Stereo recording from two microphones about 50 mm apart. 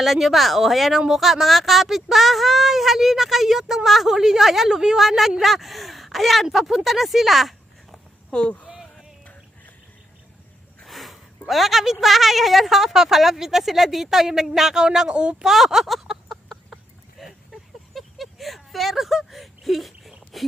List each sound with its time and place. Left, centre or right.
0.0 s a woman's voice: centre
8.3 s speech: centre
8.6 s a sound: centre
10.8 s a woman's voice: centre
15.4 s speech: centre
17.9 s a sound: centre